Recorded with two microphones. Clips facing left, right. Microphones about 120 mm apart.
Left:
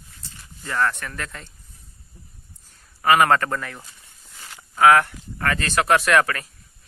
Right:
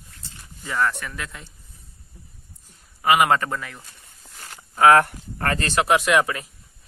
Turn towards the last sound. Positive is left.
turn(degrees=-15)  # may be behind; listen again after turning